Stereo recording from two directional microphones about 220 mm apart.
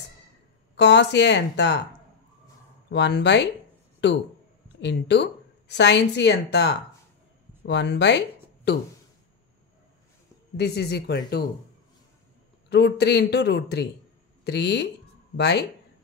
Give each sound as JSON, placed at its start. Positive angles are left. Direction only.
{"t": 0.7, "sound": "speech", "side_deg": 50}
{"t": 2.9, "sound": "speech", "side_deg": 50}
{"t": 10.6, "sound": "speech", "side_deg": 50}
{"t": 12.6, "sound": "speech", "side_deg": 50}